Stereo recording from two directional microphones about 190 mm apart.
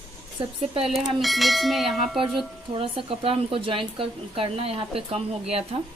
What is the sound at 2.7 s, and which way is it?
Speech, 30° right (ahead or behind).